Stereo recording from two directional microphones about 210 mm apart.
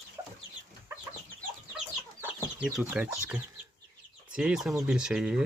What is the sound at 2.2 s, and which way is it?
Speech, 5° right (ahead or behind).